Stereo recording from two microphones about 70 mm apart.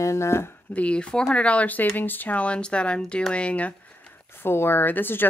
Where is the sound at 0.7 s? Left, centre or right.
Centre.